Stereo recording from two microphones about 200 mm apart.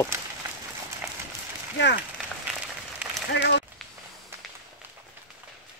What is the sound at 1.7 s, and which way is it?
Speech, 60° left (ahead or behind).